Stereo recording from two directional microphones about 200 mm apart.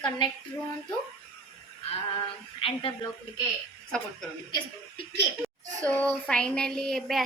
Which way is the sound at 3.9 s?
5° left (ahead or behind).